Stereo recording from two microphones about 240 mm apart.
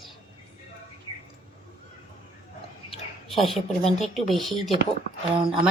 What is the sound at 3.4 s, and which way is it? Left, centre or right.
A woman's voice, centre.